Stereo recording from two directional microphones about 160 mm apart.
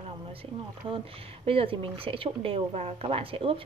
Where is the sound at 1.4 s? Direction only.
35° right (ahead or behind).